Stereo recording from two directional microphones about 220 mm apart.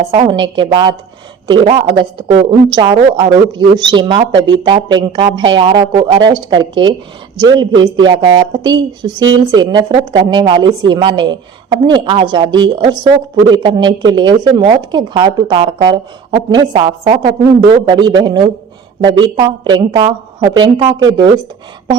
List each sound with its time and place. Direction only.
0.0 s speech: 30° right (ahead or behind)